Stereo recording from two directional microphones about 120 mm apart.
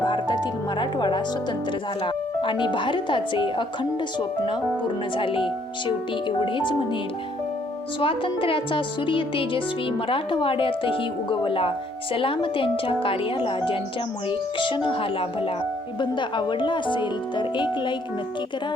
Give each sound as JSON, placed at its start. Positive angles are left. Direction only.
{"t": 0.0, "sound": "music", "side_deg": 40}
{"t": 2.0, "sound": "speech", "side_deg": 45}
{"t": 5.1, "sound": "speech", "side_deg": 45}
{"t": 7.9, "sound": "speech", "side_deg": 45}